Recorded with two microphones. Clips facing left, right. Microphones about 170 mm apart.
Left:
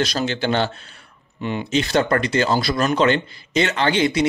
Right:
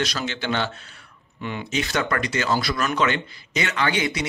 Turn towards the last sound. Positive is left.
turn(degrees=25)  # may be behind; listen again after turning